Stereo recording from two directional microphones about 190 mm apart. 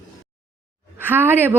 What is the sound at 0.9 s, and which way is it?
Speech, 10° right (ahead or behind).